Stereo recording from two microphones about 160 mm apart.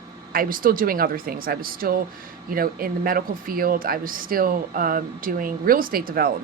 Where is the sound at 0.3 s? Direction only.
60° right (ahead or behind).